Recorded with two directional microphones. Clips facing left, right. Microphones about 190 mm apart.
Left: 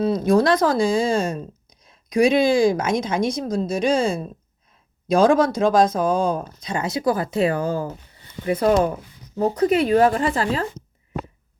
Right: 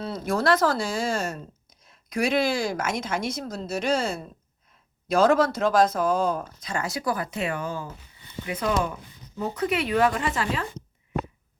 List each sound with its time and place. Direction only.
0.0 s speech: 15° left (ahead or behind); by 10.7 s 35° left (ahead or behind)